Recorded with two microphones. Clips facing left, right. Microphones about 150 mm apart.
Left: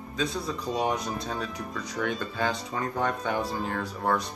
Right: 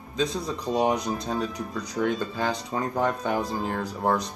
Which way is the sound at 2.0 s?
25° right (ahead or behind).